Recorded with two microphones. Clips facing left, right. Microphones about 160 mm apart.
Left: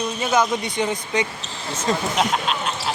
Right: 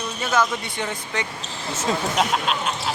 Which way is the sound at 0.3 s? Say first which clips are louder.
Left 2 dB; 15° left (ahead or behind).